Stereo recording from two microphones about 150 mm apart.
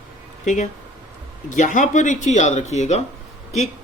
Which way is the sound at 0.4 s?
55° left (ahead or behind).